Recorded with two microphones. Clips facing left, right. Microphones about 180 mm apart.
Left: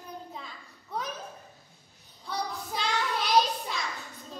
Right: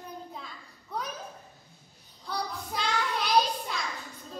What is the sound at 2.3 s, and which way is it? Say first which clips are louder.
Child singing: even; centre (ahead or behind).